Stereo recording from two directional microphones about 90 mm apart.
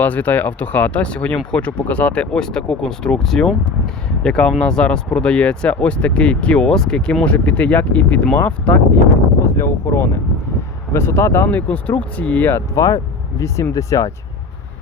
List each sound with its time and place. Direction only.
0.0 s speech: 15° left (ahead or behind)
9.4 s speech: 30° left (ahead or behind)